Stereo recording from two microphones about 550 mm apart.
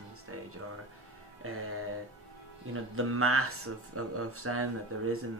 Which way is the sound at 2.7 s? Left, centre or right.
Right.